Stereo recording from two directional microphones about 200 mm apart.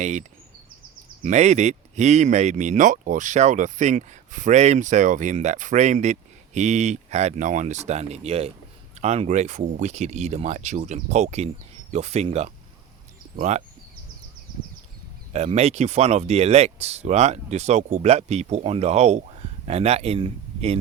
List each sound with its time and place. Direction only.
0.0 s speech: 35° right (ahead or behind)
15.3 s speech: 35° right (ahead or behind)